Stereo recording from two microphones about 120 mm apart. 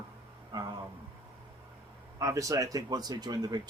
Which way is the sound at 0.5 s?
35° right (ahead or behind).